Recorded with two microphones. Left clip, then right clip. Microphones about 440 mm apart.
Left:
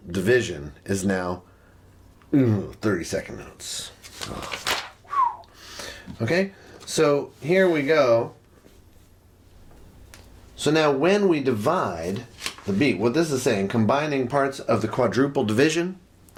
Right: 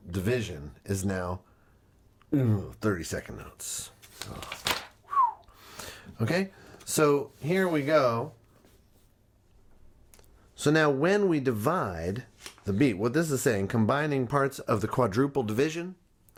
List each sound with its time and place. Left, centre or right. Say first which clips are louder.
0.1 s speech: left 10 dB; right
4.7 s whistling: left 4 dB; centre
5.0 s a sound: left 2 dB; right
10.6 s speech: left 4 dB; right